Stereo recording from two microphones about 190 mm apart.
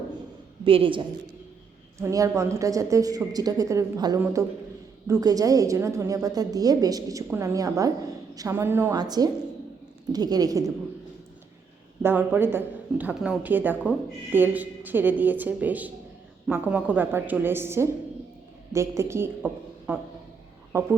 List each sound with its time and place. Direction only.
0.6 s a man's voice: 30° right (ahead or behind)
2.0 s a woman's voice: 15° right (ahead or behind)
12.0 s a woman's voice: 10° right (ahead or behind)